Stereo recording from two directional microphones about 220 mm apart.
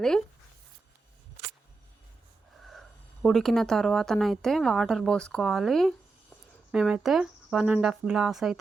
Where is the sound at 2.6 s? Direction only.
Centre (ahead or behind).